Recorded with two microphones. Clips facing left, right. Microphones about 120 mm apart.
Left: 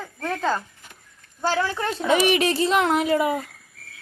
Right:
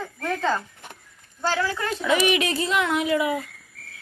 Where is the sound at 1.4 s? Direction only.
20° left (ahead or behind).